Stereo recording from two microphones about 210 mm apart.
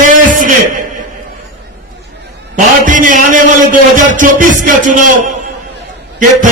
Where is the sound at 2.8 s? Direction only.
40° right (ahead or behind).